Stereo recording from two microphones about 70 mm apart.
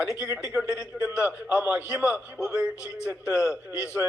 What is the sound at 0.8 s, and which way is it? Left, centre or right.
A man's voice, centre.